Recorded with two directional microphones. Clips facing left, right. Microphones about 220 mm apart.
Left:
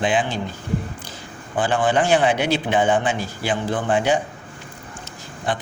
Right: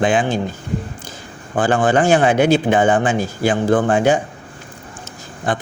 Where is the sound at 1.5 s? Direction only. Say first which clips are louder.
Right 4 dB; 45° right (ahead or behind).